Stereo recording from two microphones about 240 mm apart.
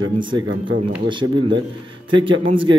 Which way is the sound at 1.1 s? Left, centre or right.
Centre.